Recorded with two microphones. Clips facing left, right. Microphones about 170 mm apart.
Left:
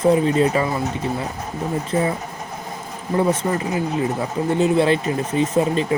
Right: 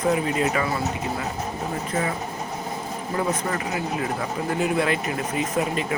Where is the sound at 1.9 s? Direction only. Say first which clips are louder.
Left 6 dB; 30° left (ahead or behind).